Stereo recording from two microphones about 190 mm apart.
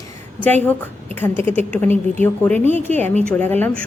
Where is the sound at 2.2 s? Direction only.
10° left (ahead or behind).